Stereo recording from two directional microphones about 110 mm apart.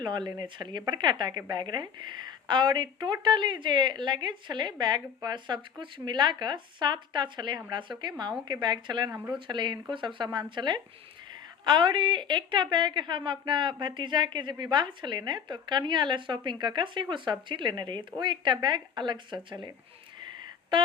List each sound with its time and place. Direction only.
0.0 s speech: 40° right (ahead or behind)
9.0 s speech: 15° right (ahead or behind)
9.5 s speech: 45° right (ahead or behind)